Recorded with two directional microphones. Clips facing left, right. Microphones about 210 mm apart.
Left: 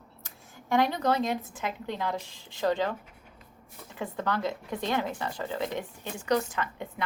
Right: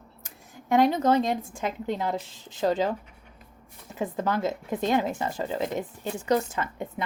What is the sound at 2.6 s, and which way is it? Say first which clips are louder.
Speech: right 2 dB; 20° right (ahead or behind).